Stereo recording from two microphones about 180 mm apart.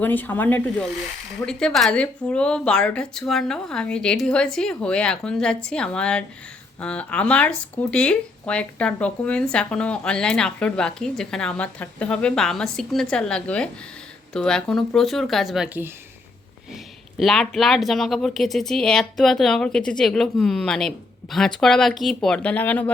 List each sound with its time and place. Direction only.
0.0 s speech: 10° left (ahead or behind); by 15.9 s 5° right (ahead or behind)
17.2 s speech: centre (ahead or behind)